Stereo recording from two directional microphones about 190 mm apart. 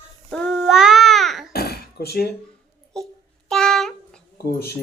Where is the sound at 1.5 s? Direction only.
55° left (ahead or behind).